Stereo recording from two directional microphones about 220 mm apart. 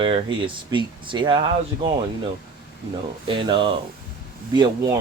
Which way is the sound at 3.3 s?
20° right (ahead or behind).